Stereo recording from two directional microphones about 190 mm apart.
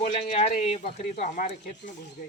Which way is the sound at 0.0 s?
35° left (ahead or behind).